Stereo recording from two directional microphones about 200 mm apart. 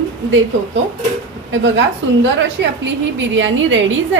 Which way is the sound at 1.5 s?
70° right (ahead or behind).